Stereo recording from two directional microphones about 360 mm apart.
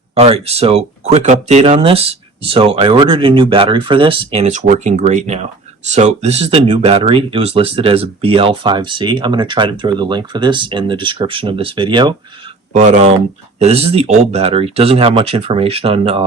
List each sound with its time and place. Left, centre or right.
0.1 s speech: centre